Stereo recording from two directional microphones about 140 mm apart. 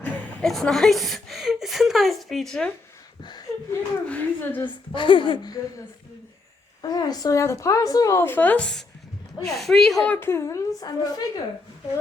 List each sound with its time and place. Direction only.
0.0 s a woman's voice: 5° left (ahead or behind)
3.2 s chuckle: 25° left (ahead or behind)
4.0 s speech: 10° left (ahead or behind)
4.9 s speech: 35° left (ahead or behind)
6.8 s a woman's voice: 30° left (ahead or behind); by 10.2 s 5° left (ahead or behind)
10.2 s a woman's voice: 20° left (ahead or behind)